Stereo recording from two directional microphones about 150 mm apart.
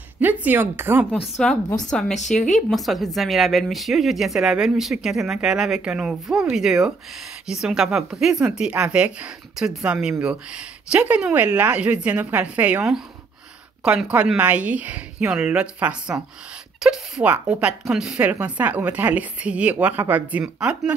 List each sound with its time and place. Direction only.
0.2 s speech: 10° right (ahead or behind)
1.3 s speech: 5° left (ahead or behind)
2.1 s speech: 50° left (ahead or behind)
2.7 s a woman's voice: centre (ahead or behind)